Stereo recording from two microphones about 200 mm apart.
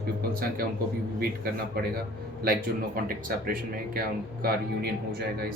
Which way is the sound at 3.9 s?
50° right (ahead or behind).